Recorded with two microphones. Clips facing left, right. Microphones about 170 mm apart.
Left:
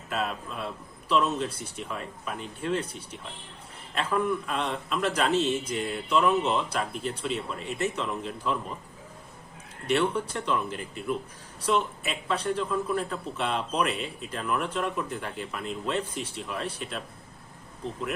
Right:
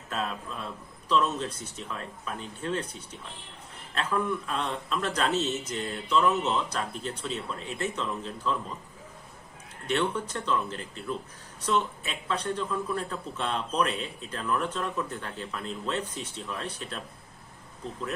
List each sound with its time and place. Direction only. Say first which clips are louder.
1.0 s a man's voice: left 1 dB; 10° left (ahead or behind)
3.9 s a man's voice: left 2 dB; 5° left (ahead or behind)
9.8 s a man's voice: left 3 dB; 10° left (ahead or behind)